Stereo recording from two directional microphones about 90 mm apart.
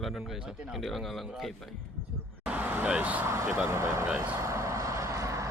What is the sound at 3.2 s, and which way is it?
Speech, 30° right (ahead or behind).